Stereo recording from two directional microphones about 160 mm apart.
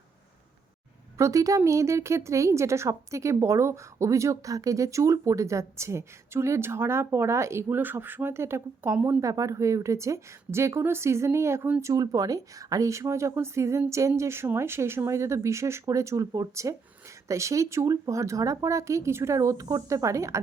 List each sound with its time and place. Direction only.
1.2 s a woman's voice: 20° right (ahead or behind)